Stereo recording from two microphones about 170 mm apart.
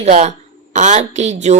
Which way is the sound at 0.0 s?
40° right (ahead or behind).